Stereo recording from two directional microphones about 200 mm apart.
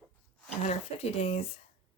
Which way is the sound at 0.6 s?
30° left (ahead or behind).